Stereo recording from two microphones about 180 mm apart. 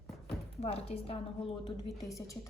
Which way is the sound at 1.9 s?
20° left (ahead or behind).